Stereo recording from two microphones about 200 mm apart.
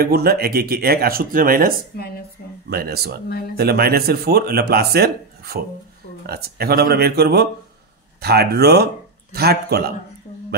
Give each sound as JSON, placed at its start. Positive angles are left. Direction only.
{"t": 0.0, "sound": "a man's voice", "side_deg": -50}
{"t": 1.9, "sound": "speech", "side_deg": 50}
{"t": 2.4, "sound": "a sound", "side_deg": 50}
{"t": 2.7, "sound": "a man's voice", "side_deg": -50}
{"t": 3.3, "sound": "speech", "side_deg": 50}
{"t": 3.5, "sound": "a man's voice", "side_deg": -50}